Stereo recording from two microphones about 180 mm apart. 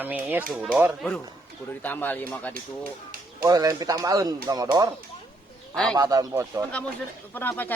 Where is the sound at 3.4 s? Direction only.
20° right (ahead or behind).